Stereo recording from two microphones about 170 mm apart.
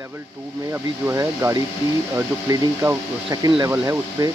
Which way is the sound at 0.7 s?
15° right (ahead or behind).